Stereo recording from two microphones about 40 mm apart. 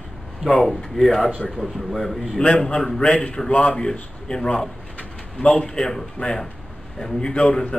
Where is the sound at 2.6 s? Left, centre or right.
Centre.